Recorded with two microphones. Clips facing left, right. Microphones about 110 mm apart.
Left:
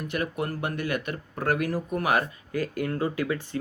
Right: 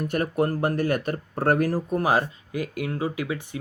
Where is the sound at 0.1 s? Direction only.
40° right (ahead or behind).